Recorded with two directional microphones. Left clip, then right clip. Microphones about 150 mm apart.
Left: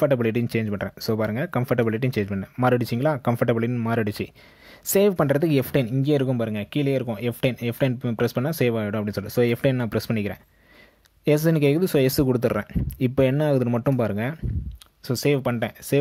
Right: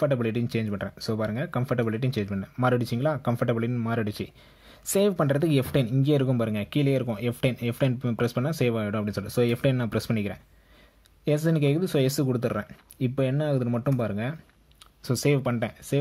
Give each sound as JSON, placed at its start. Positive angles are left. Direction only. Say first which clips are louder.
{"t": 0.0, "sound": "speech", "louder": "left 5 dB", "side_deg": 25}